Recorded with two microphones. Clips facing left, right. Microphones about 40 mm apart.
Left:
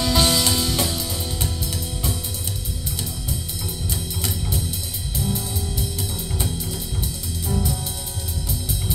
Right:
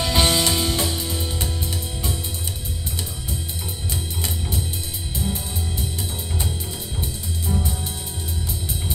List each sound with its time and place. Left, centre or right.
0.0 s music: right